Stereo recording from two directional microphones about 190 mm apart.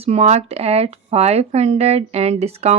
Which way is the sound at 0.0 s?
30° right (ahead or behind).